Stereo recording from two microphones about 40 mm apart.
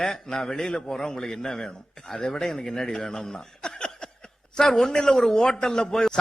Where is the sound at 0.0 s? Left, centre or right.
Centre.